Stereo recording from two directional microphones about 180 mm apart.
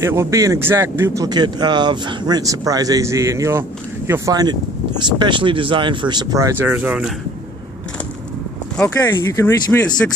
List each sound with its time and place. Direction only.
0.0 s speech: 15° right (ahead or behind)
8.7 s speech: 15° left (ahead or behind)